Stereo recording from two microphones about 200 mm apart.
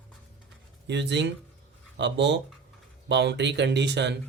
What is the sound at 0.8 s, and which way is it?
Speech, 60° right (ahead or behind).